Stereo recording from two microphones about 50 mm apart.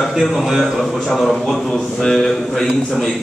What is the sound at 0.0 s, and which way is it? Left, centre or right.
A man's voice, centre.